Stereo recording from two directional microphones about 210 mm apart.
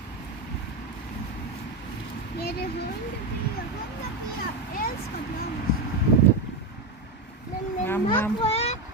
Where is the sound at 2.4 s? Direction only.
50° left (ahead or behind).